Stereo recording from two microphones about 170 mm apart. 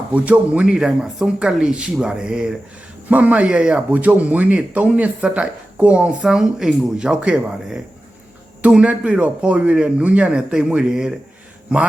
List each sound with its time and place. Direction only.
0.1 s speech: 10° right (ahead or behind)